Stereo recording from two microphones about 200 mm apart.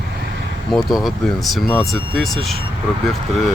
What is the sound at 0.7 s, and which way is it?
Speech, centre (ahead or behind).